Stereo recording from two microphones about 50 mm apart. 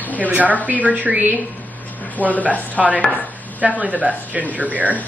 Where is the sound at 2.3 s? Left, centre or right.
Left.